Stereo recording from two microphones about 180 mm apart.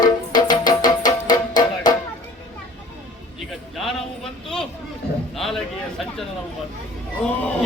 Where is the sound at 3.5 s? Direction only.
Centre (ahead or behind).